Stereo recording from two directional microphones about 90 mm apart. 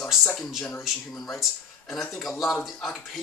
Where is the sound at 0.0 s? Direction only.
5° left (ahead or behind).